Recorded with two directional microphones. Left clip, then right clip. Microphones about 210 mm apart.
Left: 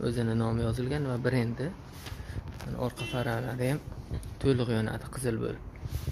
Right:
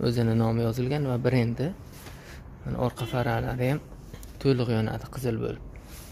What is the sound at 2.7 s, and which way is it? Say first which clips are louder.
Speech: right 5 dB; 15° right (ahead or behind).